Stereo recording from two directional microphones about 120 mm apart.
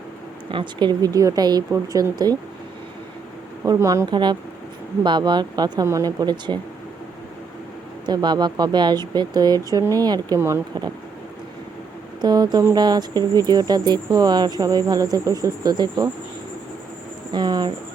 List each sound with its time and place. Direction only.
0.5 s speech: 40° right (ahead or behind)
3.7 s a woman's voice: 25° right (ahead or behind)
4.1 s speech: 40° right (ahead or behind)
8.0 s speech: 35° right (ahead or behind)
12.2 s speech: 35° right (ahead or behind)
17.3 s speech: 35° right (ahead or behind)